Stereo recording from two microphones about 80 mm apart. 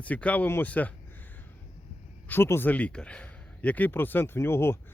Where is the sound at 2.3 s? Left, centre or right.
Left.